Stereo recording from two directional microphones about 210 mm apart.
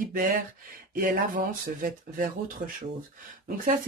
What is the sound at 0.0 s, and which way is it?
Speech, 40° right (ahead or behind).